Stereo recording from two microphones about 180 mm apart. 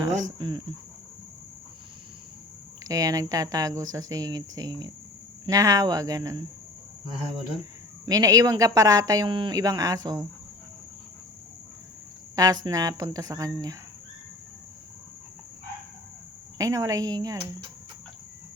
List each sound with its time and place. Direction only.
0.2 s speech: 25° right (ahead or behind)
2.8 s speech: 20° right (ahead or behind)
8.0 s speech: 20° right (ahead or behind)
12.4 s speech: 20° right (ahead or behind)
16.6 s speech: 20° right (ahead or behind)